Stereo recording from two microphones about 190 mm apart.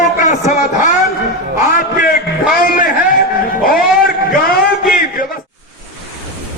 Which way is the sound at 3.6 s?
50° left (ahead or behind).